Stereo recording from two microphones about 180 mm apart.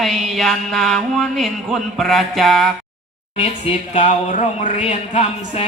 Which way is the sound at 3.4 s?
35° left (ahead or behind).